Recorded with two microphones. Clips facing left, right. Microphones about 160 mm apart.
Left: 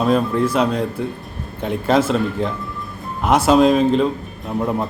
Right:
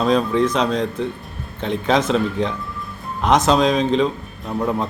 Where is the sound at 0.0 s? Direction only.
5° left (ahead or behind).